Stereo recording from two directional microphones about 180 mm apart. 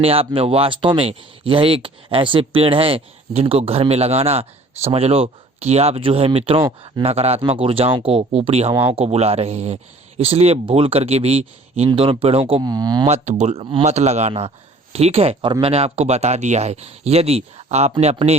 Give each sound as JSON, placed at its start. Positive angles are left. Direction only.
{"t": 0.0, "sound": "speech", "side_deg": -30}
{"t": 13.1, "sound": "speech", "side_deg": -40}